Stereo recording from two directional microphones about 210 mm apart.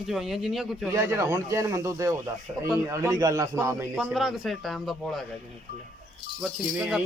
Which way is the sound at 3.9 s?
Centre (ahead or behind).